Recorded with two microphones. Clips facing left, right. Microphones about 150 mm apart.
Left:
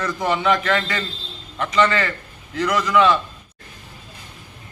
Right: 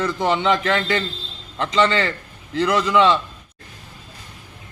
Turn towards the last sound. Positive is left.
turn(degrees=-25)  # may be behind; listen again after turning